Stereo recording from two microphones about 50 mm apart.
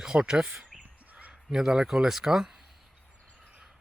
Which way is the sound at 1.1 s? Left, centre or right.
Right.